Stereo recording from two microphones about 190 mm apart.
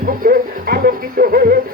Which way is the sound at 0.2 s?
50° right (ahead or behind).